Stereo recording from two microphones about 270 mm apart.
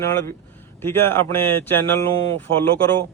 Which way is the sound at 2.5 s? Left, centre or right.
Right.